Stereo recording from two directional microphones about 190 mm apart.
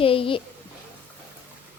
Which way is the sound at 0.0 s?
30° left (ahead or behind).